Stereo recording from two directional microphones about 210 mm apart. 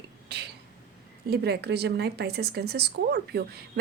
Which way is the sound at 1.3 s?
50° right (ahead or behind).